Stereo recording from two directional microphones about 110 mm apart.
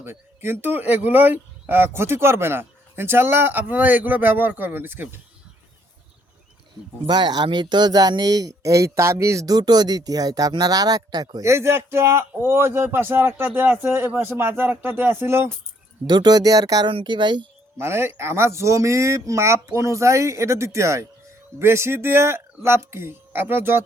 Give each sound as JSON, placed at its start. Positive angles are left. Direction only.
{"t": 0.0, "sound": "speech", "side_deg": -20}
{"t": 7.1, "sound": "speech", "side_deg": -40}
{"t": 16.0, "sound": "speech", "side_deg": -40}
{"t": 16.9, "sound": "speech", "side_deg": -45}
{"t": 17.7, "sound": "speech", "side_deg": -25}